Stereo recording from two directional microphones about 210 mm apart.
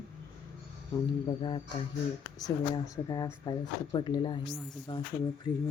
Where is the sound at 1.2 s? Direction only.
20° left (ahead or behind).